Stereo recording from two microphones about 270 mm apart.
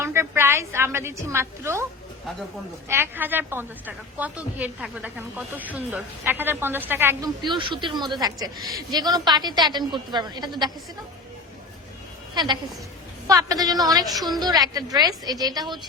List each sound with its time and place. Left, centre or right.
0.0 s a woman's voice: centre
2.9 s a woman's voice: centre
12.3 s a woman's voice: centre